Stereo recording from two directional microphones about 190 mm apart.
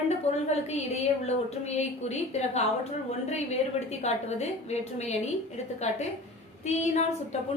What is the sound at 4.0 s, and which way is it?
A woman's voice, 35° left (ahead or behind).